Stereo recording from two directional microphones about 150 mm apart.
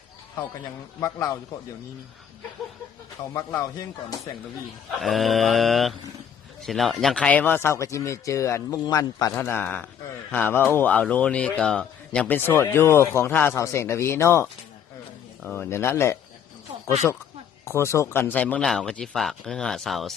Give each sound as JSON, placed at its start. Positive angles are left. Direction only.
{"t": 0.9, "sound": "speech", "side_deg": 20}
{"t": 3.3, "sound": "speech", "side_deg": 20}
{"t": 4.9, "sound": "a man's voice", "side_deg": 0}
{"t": 17.7, "sound": "speech", "side_deg": 20}